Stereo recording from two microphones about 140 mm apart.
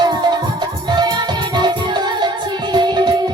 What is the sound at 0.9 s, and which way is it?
Music, 30° right (ahead or behind).